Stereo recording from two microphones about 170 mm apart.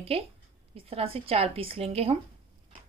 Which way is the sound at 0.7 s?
35° right (ahead or behind).